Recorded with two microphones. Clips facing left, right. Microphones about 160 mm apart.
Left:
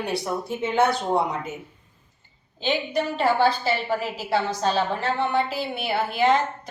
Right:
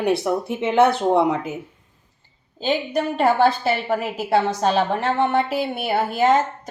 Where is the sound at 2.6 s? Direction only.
55° right (ahead or behind).